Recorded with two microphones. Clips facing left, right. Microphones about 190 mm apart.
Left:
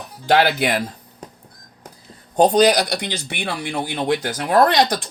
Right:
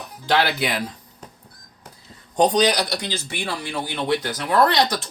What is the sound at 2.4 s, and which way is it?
Speech, 45° left (ahead or behind).